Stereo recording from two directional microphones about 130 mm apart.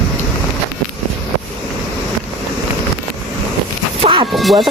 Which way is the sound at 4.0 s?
40° right (ahead or behind).